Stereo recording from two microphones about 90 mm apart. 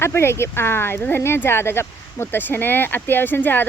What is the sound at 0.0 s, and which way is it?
Speech, 30° left (ahead or behind).